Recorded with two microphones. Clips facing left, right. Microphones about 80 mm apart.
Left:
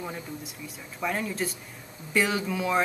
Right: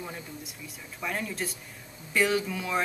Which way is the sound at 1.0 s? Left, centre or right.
Centre.